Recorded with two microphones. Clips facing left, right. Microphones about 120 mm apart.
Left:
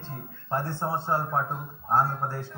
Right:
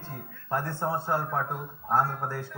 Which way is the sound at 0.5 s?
25° left (ahead or behind).